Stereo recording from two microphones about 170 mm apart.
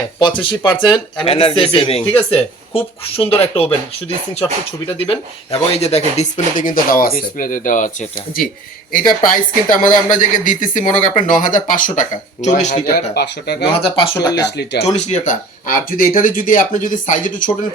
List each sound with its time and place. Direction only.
0.2 s a man's voice: 30° left (ahead or behind)
4.9 s speech: 35° left (ahead or behind); by 7.9 s 50° left (ahead or behind)
8.9 s speech: 55° left (ahead or behind)
13.1 s speech: 75° left (ahead or behind)
13.7 s a man's voice: 30° left (ahead or behind)
14.2 s speech: 20° left (ahead or behind)
14.6 s speech: 75° left (ahead or behind)
14.9 s speech: 45° left (ahead or behind)